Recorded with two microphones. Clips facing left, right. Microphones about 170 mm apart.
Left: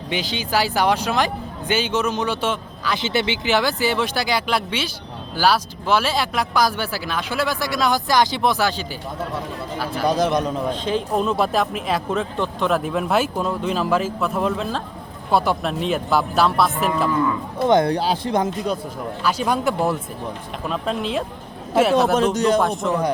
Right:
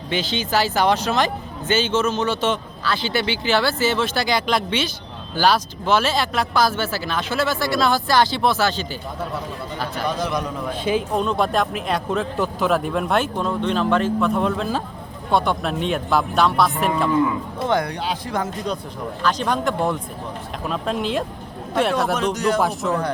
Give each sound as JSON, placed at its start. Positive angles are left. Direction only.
{"t": 0.1, "sound": "speech", "side_deg": 15}
{"t": 10.2, "sound": "a man's voice", "side_deg": 20}
{"t": 10.8, "sound": "speech", "side_deg": -5}
{"t": 17.7, "sound": "speech", "side_deg": 25}
{"t": 18.3, "sound": "a man's voice", "side_deg": 20}
{"t": 19.2, "sound": "speech", "side_deg": 10}
{"t": 22.4, "sound": "a man's voice", "side_deg": 20}
{"t": 22.6, "sound": "speech", "side_deg": 0}
{"t": 22.9, "sound": "speech", "side_deg": 15}